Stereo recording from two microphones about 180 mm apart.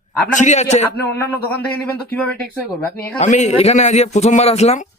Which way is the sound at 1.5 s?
10° left (ahead or behind).